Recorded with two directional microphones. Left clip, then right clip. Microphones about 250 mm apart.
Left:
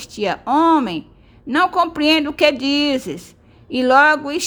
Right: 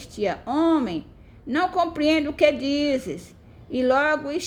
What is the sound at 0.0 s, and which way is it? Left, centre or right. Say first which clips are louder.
Speech: left 5 dB; centre.